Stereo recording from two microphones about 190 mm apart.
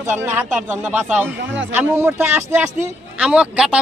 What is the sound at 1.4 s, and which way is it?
Speech, 75° right (ahead or behind).